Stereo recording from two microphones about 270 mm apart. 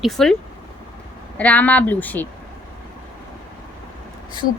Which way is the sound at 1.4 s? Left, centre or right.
Centre.